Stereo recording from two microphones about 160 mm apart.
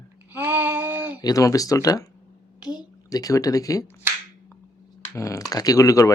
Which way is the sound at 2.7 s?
25° left (ahead or behind).